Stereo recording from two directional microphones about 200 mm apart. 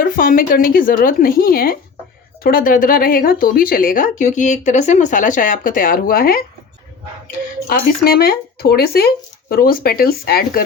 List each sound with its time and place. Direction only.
0.0 s speech: 45° left (ahead or behind)
7.7 s speech: 50° left (ahead or behind)